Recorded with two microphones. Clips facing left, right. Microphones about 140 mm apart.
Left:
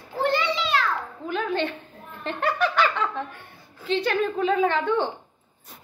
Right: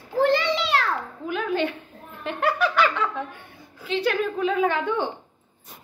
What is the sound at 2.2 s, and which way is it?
Giggle, 10° right (ahead or behind).